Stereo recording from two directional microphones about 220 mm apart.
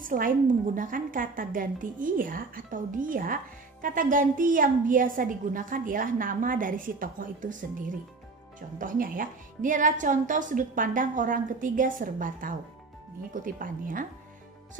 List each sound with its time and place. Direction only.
0.0 s a woman's voice: 40° right (ahead or behind)
8.5 s a woman's voice: 40° right (ahead or behind)